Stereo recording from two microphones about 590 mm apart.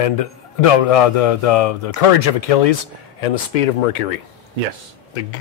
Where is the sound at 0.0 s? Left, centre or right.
Left.